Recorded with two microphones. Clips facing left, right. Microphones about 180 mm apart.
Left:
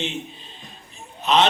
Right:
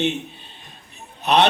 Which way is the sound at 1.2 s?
65° right (ahead or behind).